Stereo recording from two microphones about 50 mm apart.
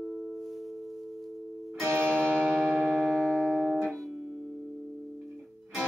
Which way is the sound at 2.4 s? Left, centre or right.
Centre.